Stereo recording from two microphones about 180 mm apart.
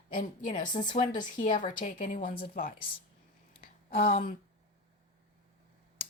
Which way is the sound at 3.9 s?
55° left (ahead or behind).